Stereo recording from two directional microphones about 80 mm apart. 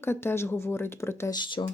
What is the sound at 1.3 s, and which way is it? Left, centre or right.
Speech, left.